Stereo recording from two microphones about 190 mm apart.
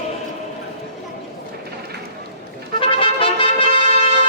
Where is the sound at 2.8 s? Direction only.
30° left (ahead or behind).